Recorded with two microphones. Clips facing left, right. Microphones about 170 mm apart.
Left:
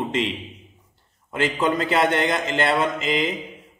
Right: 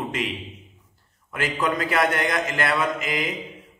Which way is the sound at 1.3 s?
25° left (ahead or behind).